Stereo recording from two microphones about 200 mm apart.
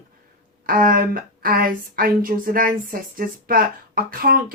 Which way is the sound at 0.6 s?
45° right (ahead or behind).